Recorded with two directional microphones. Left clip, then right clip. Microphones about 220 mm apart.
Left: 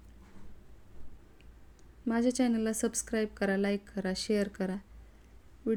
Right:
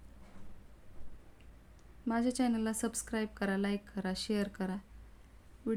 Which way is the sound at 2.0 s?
10° left (ahead or behind).